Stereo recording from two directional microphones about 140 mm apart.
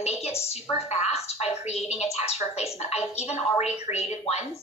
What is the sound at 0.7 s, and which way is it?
Speech, 50° left (ahead or behind).